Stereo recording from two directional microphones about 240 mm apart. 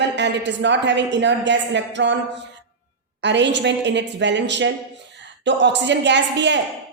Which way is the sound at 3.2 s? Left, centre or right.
Right.